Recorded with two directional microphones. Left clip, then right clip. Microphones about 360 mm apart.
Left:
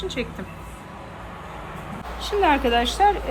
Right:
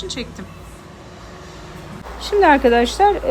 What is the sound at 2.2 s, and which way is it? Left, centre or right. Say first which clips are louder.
Speech: right 7 dB; right.